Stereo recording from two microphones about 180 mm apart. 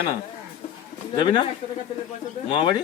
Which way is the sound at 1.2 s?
25° left (ahead or behind).